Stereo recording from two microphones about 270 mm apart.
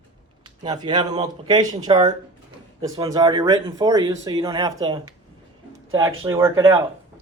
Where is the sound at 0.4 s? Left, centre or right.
Centre.